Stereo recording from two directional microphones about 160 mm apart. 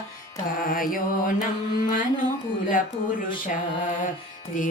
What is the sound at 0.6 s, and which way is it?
Mantra, 60° left (ahead or behind).